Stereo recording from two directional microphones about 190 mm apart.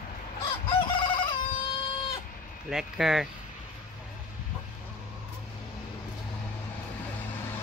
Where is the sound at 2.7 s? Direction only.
5° right (ahead or behind).